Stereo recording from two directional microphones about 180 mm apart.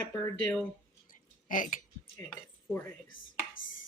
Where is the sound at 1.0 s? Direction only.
45° left (ahead or behind).